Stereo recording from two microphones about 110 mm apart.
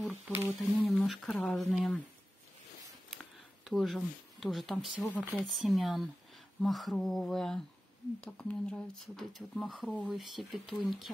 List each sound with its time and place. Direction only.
0.1 s speech: 20° right (ahead or behind)
0.6 s speech: centre (ahead or behind)
1.3 s speech: 10° left (ahead or behind)
1.6 s speech: centre (ahead or behind)
3.6 s speech: centre (ahead or behind)
5.0 s speech: 15° left (ahead or behind)
5.5 s speech: centre (ahead or behind)